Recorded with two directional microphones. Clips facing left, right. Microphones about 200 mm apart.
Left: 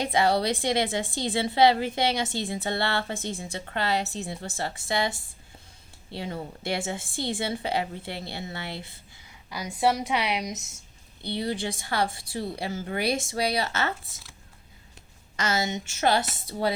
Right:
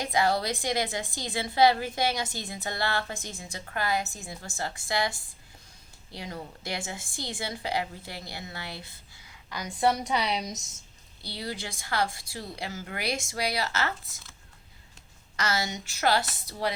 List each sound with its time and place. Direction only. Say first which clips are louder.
0.0 s a woman's voice: left 3 dB; 25° left (ahead or behind)
9.5 s a woman's voice: left 1 dB; 10° left (ahead or behind)
11.3 s a woman's voice: left 7 dB; 25° left (ahead or behind)
15.4 s a woman's voice: left 3 dB; 25° left (ahead or behind)